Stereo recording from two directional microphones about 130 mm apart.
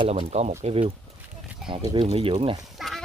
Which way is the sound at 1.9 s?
45° right (ahead or behind).